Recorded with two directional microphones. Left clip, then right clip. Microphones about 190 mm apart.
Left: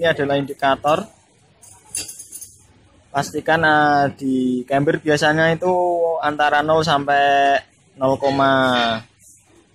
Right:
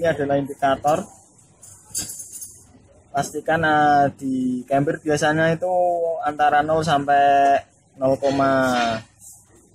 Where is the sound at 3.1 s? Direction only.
5° left (ahead or behind).